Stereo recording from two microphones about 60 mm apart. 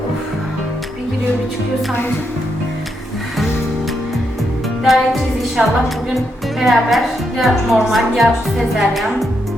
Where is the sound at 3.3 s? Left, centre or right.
Centre.